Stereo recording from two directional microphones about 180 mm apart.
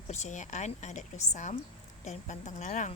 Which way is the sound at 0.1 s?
40° left (ahead or behind).